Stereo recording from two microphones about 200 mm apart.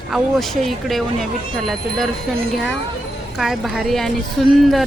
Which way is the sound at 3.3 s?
Centre (ahead or behind).